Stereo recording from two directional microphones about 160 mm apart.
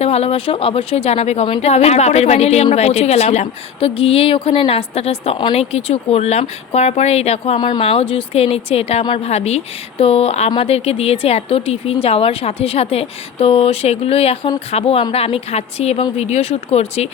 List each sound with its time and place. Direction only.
0.0 s speech: 40° left (ahead or behind)